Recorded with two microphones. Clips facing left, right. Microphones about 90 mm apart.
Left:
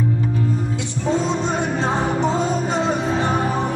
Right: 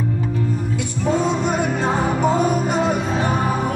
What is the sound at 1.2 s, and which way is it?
Music, 25° left (ahead or behind).